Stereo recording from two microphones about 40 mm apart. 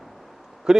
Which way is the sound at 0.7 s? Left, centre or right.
Centre.